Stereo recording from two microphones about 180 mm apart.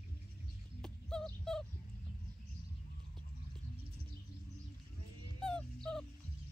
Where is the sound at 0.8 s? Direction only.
5° left (ahead or behind).